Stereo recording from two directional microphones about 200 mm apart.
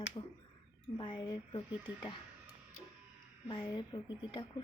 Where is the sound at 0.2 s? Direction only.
20° left (ahead or behind).